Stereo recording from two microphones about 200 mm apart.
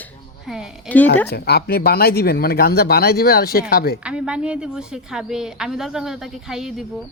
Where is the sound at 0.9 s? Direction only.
10° left (ahead or behind).